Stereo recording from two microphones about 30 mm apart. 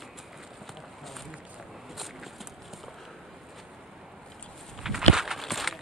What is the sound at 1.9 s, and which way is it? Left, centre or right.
Walk, centre.